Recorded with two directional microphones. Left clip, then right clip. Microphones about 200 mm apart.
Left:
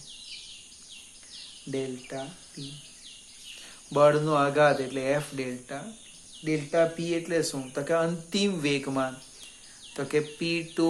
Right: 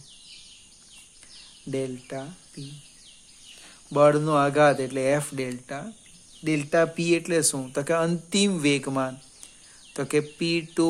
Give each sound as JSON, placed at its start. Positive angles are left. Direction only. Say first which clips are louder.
{"t": 1.7, "sound": "speech", "louder": "right 3 dB", "side_deg": -40}
{"t": 3.9, "sound": "speech", "louder": "right 2 dB", "side_deg": -35}
{"t": 6.4, "sound": "speech", "louder": "right 2 dB", "side_deg": -55}